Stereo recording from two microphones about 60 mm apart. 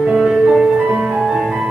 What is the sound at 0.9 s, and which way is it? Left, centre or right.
Music, centre.